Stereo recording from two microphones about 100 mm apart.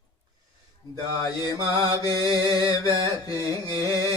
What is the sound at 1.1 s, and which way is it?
Mantra, 40° left (ahead or behind).